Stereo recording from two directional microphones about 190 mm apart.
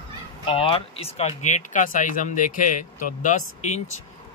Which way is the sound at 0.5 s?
30° left (ahead or behind).